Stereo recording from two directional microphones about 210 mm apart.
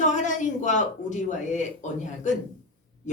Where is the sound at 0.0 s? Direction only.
35° left (ahead or behind).